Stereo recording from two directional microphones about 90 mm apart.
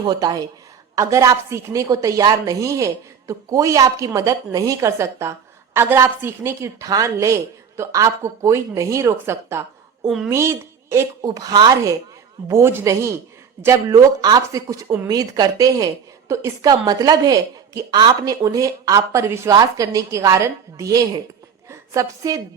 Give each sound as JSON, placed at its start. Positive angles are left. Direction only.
{"t": 0.1, "sound": "a woman's voice", "side_deg": -45}
{"t": 6.8, "sound": "a woman's voice", "side_deg": -40}
{"t": 11.3, "sound": "a woman's voice", "side_deg": -50}
{"t": 12.5, "sound": "a woman's voice", "side_deg": -30}
{"t": 13.8, "sound": "a woman's voice", "side_deg": -45}